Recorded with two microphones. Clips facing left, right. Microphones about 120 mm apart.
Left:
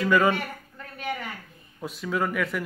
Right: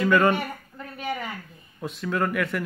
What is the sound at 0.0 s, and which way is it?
Speech, centre (ahead or behind).